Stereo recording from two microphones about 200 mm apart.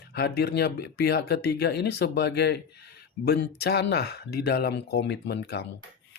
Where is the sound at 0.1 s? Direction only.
55° left (ahead or behind).